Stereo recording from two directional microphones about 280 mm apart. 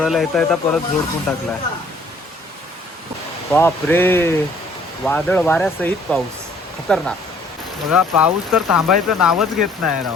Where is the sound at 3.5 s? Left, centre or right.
Centre.